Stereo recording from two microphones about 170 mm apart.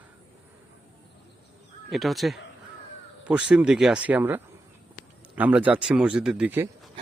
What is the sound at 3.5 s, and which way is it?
Speech, 5° right (ahead or behind).